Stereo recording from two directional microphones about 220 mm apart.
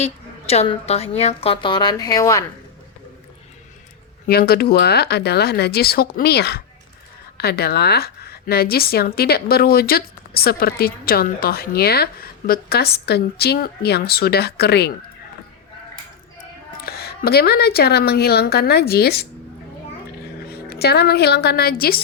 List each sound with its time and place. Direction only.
0.0 s a woman's voice: 30° left (ahead or behind)
4.3 s a woman's voice: 45° left (ahead or behind)
16.8 s a woman's voice: 45° left (ahead or behind)
20.5 s a woman's voice: 45° left (ahead or behind)